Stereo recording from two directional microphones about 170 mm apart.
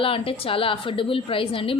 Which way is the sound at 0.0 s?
35° left (ahead or behind).